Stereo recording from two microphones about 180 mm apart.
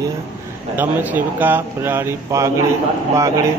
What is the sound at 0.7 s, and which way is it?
Speech, 10° right (ahead or behind).